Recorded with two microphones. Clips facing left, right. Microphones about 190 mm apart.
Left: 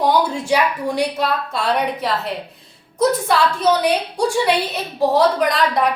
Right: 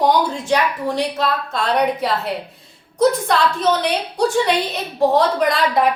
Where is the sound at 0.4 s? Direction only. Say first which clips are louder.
Even; 10° left (ahead or behind).